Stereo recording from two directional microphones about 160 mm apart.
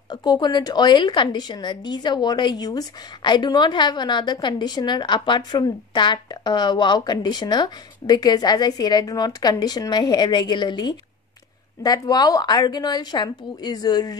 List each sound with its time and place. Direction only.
0.1 s a woman's voice: 25° left (ahead or behind)